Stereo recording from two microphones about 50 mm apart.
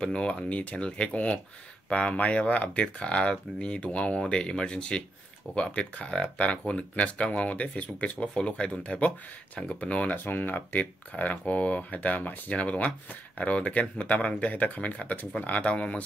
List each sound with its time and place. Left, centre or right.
0.0 s speech: left
10.1 s speech: left